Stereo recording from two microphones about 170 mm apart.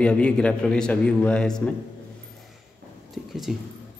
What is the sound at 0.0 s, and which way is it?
A man's voice, 5° left (ahead or behind).